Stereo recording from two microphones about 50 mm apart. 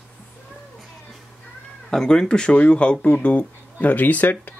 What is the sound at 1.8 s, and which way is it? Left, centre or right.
Speech, centre.